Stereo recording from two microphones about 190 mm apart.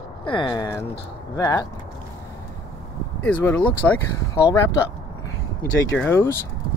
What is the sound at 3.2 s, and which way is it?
Speech, 10° left (ahead or behind).